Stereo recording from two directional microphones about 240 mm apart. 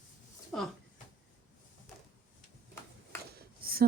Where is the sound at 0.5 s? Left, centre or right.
Centre.